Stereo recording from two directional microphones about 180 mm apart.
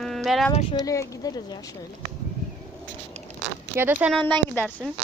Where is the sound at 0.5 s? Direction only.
35° left (ahead or behind).